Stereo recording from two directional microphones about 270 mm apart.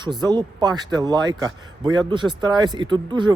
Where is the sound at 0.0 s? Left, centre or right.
Centre.